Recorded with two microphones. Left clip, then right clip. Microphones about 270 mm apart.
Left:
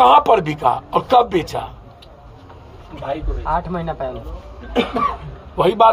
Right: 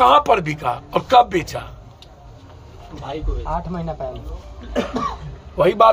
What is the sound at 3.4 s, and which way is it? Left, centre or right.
Speech, right.